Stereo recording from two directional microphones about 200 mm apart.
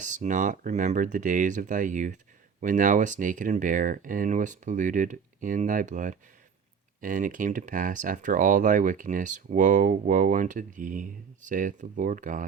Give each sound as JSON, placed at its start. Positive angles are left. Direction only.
{"t": 0.0, "sound": "speech", "side_deg": -40}